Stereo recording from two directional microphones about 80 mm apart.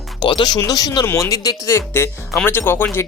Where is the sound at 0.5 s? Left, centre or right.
Left.